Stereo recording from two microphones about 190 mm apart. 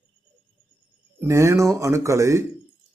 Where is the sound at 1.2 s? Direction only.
15° right (ahead or behind).